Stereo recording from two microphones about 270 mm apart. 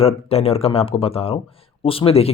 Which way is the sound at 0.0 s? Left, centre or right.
Left.